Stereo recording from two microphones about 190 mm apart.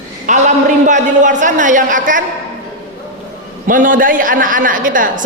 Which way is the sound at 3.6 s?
45° right (ahead or behind).